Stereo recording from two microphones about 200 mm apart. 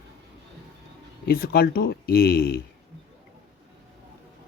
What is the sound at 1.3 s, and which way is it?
Speech, 50° left (ahead or behind).